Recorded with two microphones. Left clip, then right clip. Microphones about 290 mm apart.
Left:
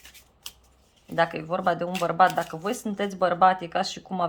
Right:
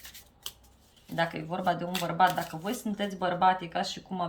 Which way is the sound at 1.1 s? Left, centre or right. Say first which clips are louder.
Left 6 dB; centre.